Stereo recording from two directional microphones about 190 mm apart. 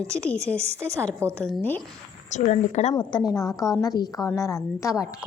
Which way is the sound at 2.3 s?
40° left (ahead or behind).